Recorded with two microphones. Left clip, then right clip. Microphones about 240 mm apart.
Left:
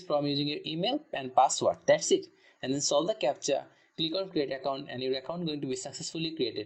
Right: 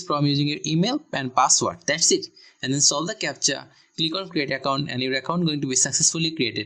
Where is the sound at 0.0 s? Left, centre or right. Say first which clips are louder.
Right 6 dB; centre.